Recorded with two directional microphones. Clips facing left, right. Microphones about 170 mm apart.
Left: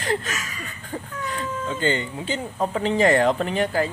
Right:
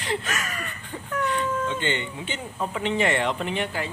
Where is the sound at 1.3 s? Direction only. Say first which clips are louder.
Right 1 dB; 40° left (ahead or behind).